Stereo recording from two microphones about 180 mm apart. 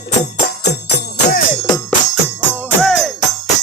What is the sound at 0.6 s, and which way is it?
Music, 70° left (ahead or behind).